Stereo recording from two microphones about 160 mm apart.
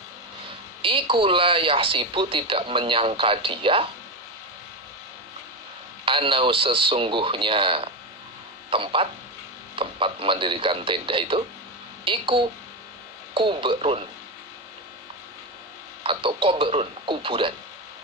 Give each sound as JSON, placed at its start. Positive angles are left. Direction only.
{"t": 0.8, "sound": "speech", "side_deg": -35}
{"t": 6.1, "sound": "speech", "side_deg": -35}
{"t": 16.0, "sound": "speech", "side_deg": -35}